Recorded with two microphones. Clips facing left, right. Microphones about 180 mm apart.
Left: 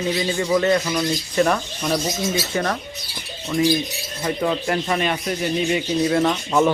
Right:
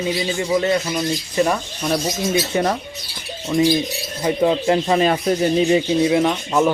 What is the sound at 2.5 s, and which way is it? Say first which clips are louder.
Speech: right 3 dB; 20° right (ahead or behind).